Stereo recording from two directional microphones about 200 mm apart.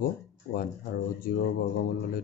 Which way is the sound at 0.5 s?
45° left (ahead or behind).